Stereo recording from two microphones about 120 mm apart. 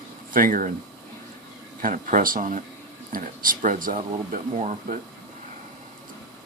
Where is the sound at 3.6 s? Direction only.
85° right.